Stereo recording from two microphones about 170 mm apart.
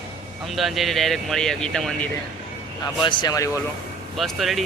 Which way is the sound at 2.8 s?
25° left (ahead or behind).